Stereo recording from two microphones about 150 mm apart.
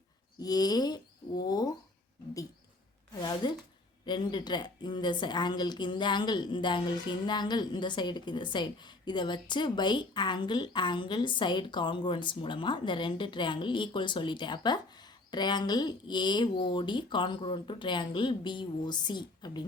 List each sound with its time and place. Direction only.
0.3 s speech: 25° left (ahead or behind)
3.2 s a woman's voice: 30° left (ahead or behind)